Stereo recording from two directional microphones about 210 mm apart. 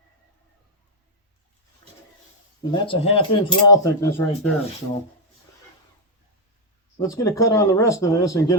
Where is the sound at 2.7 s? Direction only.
25° left (ahead or behind).